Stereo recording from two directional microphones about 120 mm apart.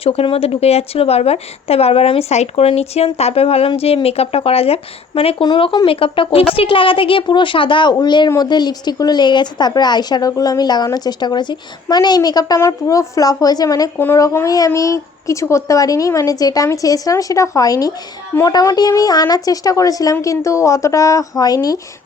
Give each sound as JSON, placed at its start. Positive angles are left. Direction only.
{"t": 0.0, "sound": "a woman's voice", "side_deg": 55}